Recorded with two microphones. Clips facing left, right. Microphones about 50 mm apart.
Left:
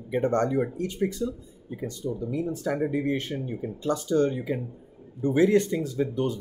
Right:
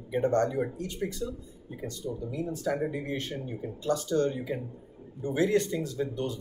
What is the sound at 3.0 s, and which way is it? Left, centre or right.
Speech, left.